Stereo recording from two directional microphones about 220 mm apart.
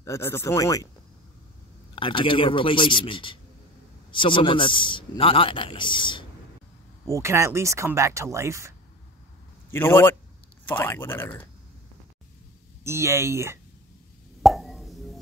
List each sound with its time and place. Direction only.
0.0 s speech: 10° left (ahead or behind)
2.0 s a man's voice: 20° left (ahead or behind)
7.1 s speech: 15° right (ahead or behind)
9.7 s speech: 10° left (ahead or behind)
12.8 s speech: 10° right (ahead or behind)
14.4 s plop: centre (ahead or behind)